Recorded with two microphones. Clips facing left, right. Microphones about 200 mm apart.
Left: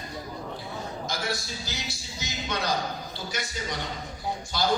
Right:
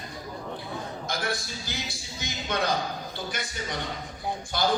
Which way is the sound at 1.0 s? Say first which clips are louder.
Right 1 dB; 55° right (ahead or behind).